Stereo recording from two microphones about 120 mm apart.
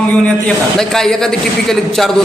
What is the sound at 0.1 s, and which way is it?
A man's voice, 5° left (ahead or behind).